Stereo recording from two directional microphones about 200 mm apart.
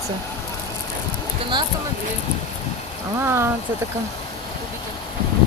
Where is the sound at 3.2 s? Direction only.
10° right (ahead or behind).